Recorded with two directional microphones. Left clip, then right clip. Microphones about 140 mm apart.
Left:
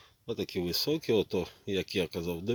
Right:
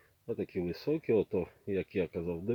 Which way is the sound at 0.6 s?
15° left (ahead or behind).